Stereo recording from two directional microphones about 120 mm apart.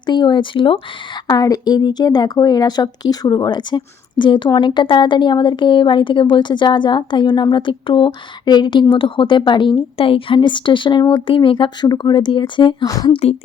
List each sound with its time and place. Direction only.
0.0 s speech: 40° left (ahead or behind)
1.3 s speech: 30° left (ahead or behind)